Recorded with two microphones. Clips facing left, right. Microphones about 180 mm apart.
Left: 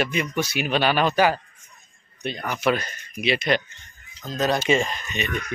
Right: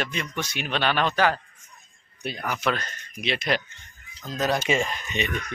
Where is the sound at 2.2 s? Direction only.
5° right (ahead or behind).